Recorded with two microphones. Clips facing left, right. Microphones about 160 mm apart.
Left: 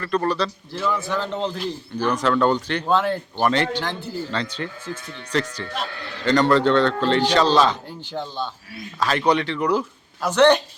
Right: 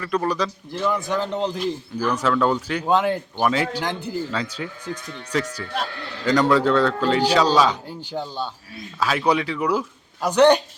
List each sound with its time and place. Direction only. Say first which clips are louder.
0.0 s a man's voice: left 1 dB; 10° right (ahead or behind)
1.4 s a man's voice: right 2 dB; 5° right (ahead or behind)
3.4 s speech: left 1 dB; 5° right (ahead or behind)
3.8 s a man's voice: right 1 dB; 15° right (ahead or behind)